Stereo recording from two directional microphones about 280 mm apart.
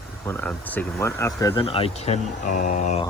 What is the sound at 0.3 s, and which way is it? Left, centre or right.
Speech, centre.